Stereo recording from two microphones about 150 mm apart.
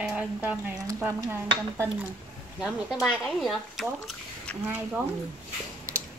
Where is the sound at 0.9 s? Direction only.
20° right (ahead or behind).